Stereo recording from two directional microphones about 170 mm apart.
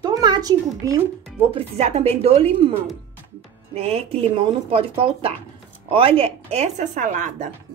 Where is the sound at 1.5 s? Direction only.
40° right (ahead or behind).